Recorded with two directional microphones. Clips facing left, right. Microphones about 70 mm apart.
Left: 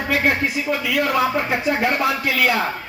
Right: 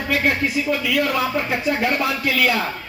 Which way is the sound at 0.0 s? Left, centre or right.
Left.